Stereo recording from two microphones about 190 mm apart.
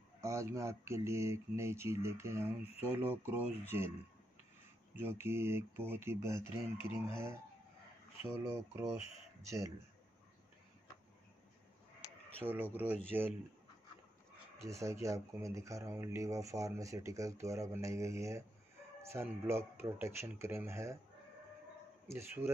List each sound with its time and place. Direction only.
0.2 s speech: 15° right (ahead or behind)
5.2 s speech: 15° right (ahead or behind)
12.4 s speech: 10° right (ahead or behind)
14.6 s speech: 15° right (ahead or behind)
22.0 s speech: 15° right (ahead or behind)